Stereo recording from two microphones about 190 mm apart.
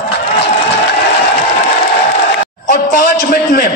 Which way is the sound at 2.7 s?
50° left (ahead or behind).